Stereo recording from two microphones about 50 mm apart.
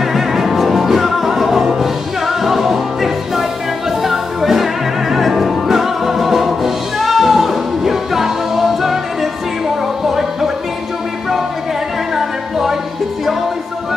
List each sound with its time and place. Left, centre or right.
0.0 s music: centre
12.2 s music: centre